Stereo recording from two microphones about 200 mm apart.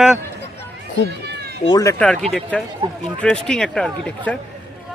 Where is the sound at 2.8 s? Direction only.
25° right (ahead or behind).